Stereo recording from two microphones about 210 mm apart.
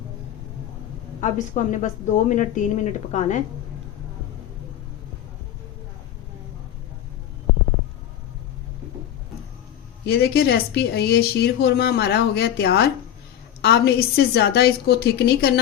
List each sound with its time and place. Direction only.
1.2 s a woman's voice: 35° left (ahead or behind)
10.1 s speech: 50° left (ahead or behind)